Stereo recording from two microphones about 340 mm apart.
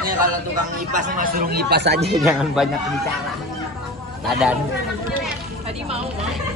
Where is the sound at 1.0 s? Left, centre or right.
Right.